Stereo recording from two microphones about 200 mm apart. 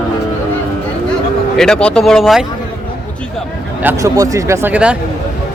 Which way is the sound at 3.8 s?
15° right (ahead or behind).